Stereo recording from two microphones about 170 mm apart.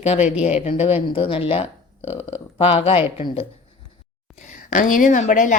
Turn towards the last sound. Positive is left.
turn(degrees=50)  # may be behind; listen again after turning